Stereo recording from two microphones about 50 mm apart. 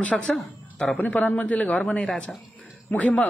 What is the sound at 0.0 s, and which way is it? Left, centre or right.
Speech, left.